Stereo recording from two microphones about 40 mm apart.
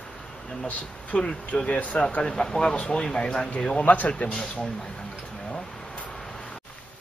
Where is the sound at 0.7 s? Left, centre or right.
Left.